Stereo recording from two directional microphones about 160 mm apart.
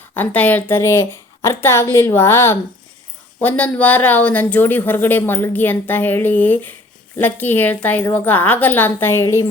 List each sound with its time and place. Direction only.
0.1 s speech: 10° left (ahead or behind)